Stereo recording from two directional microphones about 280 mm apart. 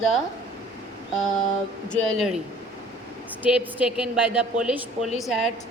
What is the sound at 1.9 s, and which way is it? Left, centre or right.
Speech, centre.